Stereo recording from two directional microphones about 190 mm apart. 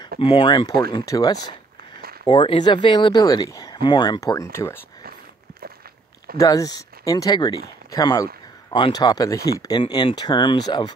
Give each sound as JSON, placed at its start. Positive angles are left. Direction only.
{"t": 0.2, "sound": "speech", "side_deg": 30}
{"t": 6.3, "sound": "speech", "side_deg": 20}